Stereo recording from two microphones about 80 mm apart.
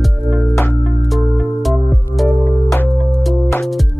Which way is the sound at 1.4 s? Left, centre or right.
Centre.